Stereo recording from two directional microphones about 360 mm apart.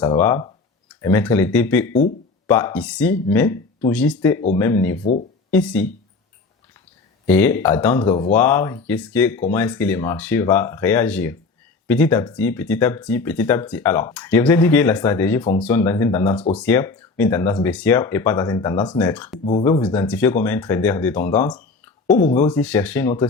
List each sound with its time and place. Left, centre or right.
0.0 s speech: centre
7.3 s speech: centre